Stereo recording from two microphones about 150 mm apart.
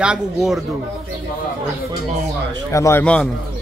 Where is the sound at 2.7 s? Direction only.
20° left (ahead or behind).